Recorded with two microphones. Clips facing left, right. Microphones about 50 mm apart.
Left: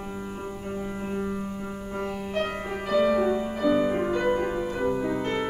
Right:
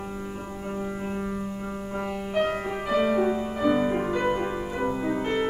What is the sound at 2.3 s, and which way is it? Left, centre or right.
Music, centre.